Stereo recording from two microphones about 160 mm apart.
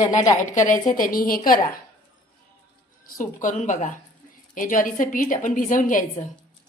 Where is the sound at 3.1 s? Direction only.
55° left (ahead or behind).